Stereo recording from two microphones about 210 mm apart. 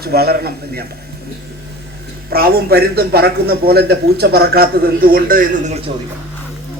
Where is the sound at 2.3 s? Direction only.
45° right (ahead or behind).